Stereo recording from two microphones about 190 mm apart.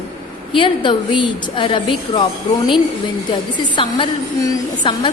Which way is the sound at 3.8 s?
20° left (ahead or behind).